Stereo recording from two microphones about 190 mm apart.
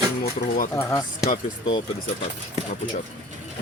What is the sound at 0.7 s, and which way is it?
Speech, 15° left (ahead or behind).